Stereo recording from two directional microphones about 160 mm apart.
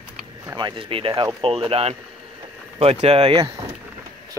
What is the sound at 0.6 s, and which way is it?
Speech, 30° right (ahead or behind).